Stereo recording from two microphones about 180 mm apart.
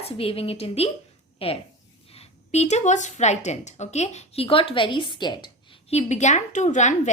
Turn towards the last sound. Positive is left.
turn(degrees=40)  # may be behind; listen again after turning